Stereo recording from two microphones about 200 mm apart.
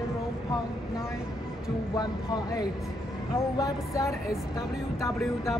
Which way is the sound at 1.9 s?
20° left (ahead or behind).